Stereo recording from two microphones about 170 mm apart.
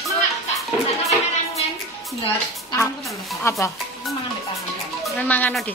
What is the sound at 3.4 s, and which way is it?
Speech, 15° left (ahead or behind).